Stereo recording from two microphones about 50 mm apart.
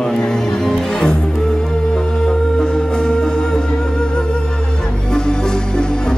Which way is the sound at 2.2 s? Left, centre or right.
Centre.